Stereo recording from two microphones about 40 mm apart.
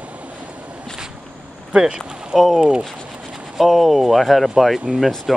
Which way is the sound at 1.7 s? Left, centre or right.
Right.